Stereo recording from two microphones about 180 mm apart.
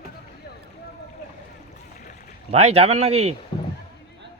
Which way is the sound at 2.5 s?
35° right (ahead or behind).